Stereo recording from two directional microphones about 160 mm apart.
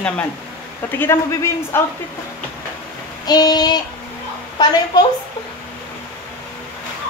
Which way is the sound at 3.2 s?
25° left (ahead or behind).